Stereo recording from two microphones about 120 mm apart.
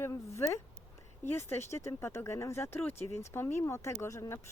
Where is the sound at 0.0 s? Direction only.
25° left (ahead or behind).